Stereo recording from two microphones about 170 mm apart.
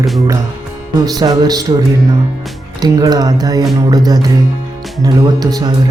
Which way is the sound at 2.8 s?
25° right (ahead or behind).